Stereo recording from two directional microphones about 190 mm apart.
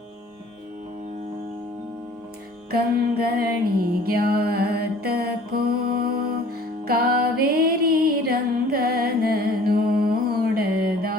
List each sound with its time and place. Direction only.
2.6 s music: 55° right (ahead or behind)